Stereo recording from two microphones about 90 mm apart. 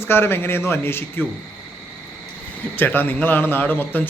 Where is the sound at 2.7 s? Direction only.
20° left (ahead or behind).